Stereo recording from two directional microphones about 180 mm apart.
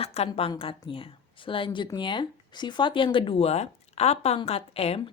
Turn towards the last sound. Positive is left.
turn(degrees=35)  # may be behind; listen again after turning